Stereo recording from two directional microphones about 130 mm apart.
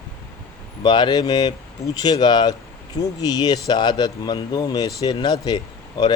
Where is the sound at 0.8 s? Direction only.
35° left (ahead or behind).